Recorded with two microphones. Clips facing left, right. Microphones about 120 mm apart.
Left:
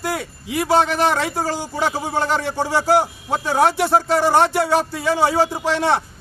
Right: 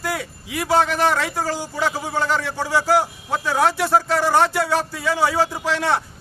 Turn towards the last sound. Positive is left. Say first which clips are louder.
# left 2 dB
turn(degrees=25)  # may be behind; listen again after turning